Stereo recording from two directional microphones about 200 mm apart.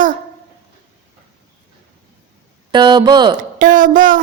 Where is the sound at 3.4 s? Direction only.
40° right (ahead or behind).